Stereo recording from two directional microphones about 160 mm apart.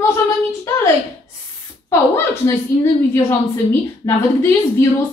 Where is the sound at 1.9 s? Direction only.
15° left (ahead or behind).